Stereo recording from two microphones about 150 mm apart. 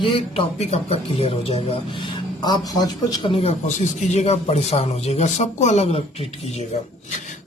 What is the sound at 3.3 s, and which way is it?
Speech, 45° left (ahead or behind).